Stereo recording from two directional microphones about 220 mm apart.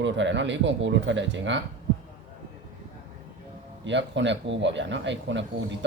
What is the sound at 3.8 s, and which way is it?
A man's voice, 55° right (ahead or behind).